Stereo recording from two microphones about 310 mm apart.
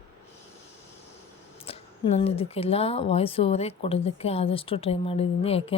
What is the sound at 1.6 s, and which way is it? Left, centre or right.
Speech, centre.